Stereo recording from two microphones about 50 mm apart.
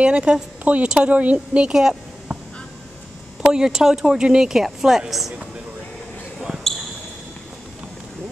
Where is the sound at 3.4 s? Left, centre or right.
Centre.